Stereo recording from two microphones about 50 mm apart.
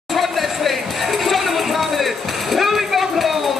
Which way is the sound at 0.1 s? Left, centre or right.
Centre.